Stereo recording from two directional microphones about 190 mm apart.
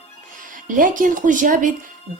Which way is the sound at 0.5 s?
45° right (ahead or behind).